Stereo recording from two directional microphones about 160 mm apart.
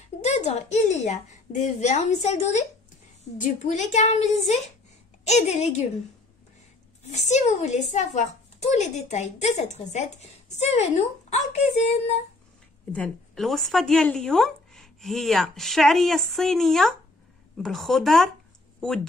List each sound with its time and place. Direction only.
0.2 s a woman's voice: 45° left (ahead or behind)
7.1 s a woman's voice: 45° left (ahead or behind)
12.9 s speech: 5° left (ahead or behind)